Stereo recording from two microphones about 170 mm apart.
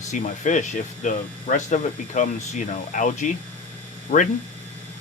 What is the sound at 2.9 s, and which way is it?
Speech, 50° left (ahead or behind).